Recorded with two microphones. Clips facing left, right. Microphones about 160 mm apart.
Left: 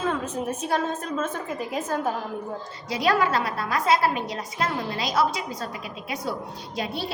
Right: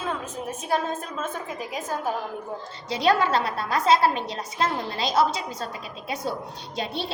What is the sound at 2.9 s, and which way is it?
A woman's voice, 25° right (ahead or behind).